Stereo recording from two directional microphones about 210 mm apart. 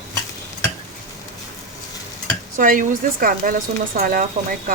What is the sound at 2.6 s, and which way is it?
Speech, 40° right (ahead or behind).